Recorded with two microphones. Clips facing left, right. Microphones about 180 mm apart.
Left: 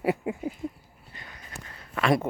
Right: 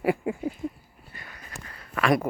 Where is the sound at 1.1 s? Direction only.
20° left (ahead or behind).